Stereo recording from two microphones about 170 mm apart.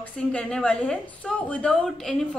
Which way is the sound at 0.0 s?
5° left (ahead or behind).